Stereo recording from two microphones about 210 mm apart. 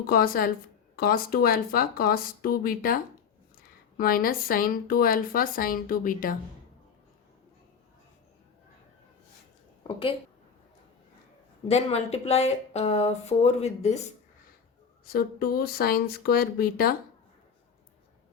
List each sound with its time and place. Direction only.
0.1 s a woman's voice: 45° left (ahead or behind)
9.8 s speech: 25° left (ahead or behind)
11.7 s speech: 30° left (ahead or behind)
15.0 s a woman's voice: 45° left (ahead or behind)